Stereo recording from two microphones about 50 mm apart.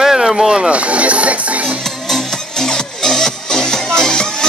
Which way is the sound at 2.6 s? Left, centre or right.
Centre.